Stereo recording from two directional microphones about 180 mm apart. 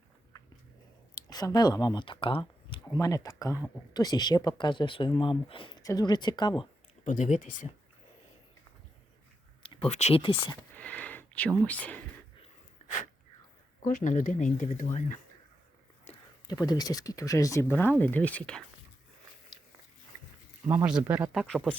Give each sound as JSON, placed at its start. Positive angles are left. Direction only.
{"t": 1.3, "sound": "speech", "side_deg": 20}
{"t": 7.0, "sound": "speech", "side_deg": 40}
{"t": 9.6, "sound": "speech", "side_deg": 35}
{"t": 10.8, "sound": "a sound", "side_deg": 10}
{"t": 11.6, "sound": "speech", "side_deg": 10}
{"t": 13.8, "sound": "speech", "side_deg": 45}
{"t": 16.1, "sound": "a sound", "side_deg": 40}
{"t": 16.5, "sound": "speech", "side_deg": 20}
{"t": 20.8, "sound": "speech", "side_deg": -10}
{"t": 21.4, "sound": "speech", "side_deg": 5}